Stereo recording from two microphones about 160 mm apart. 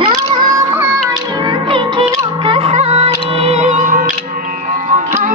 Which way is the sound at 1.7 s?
35° right (ahead or behind).